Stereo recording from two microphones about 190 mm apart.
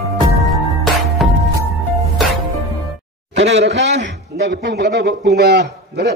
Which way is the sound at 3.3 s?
70° right (ahead or behind).